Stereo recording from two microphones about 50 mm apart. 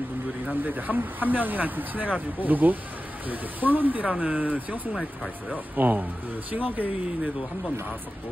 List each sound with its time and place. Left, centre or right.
0.5 s speech: right
5.8 s speech: right